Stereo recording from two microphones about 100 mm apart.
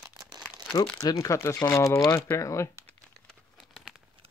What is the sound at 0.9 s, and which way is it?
Speech, 35° left (ahead or behind).